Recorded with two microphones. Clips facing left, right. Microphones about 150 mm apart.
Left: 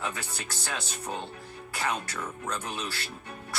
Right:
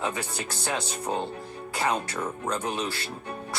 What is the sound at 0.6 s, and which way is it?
Music, 30° right (ahead or behind).